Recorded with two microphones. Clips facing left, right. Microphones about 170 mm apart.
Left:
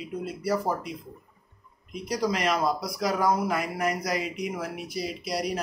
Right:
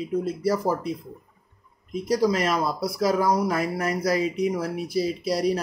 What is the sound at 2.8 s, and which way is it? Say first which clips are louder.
Speech: right 4 dB; 35° right (ahead or behind).